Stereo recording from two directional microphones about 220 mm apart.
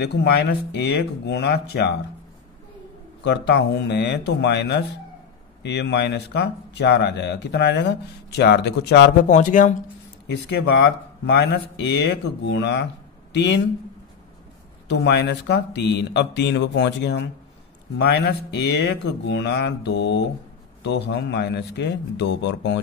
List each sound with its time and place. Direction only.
0.0 s speech: 50° left (ahead or behind)
3.3 s speech: 50° left (ahead or behind)
9.3 s speech: 35° left (ahead or behind)
10.2 s speech: 50° left (ahead or behind)
14.9 s speech: 50° left (ahead or behind)